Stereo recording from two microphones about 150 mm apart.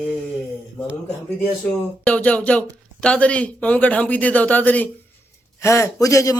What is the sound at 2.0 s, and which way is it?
A man's voice, 10° left (ahead or behind).